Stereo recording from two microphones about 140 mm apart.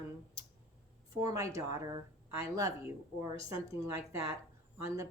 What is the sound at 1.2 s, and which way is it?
Speech, 25° right (ahead or behind).